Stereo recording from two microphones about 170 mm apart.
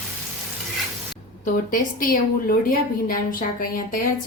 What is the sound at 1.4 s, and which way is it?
A woman's voice, 55° left (ahead or behind).